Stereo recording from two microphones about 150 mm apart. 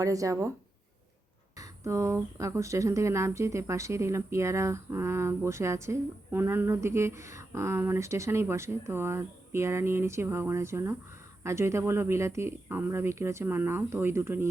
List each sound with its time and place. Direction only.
0.0 s speech: 20° right (ahead or behind)
1.5 s speech: 20° right (ahead or behind)